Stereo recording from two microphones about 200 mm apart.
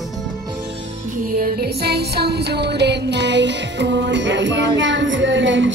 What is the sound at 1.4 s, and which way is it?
Music, 50° right (ahead or behind).